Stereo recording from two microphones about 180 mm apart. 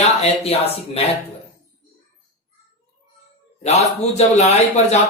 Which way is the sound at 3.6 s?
35° left (ahead or behind).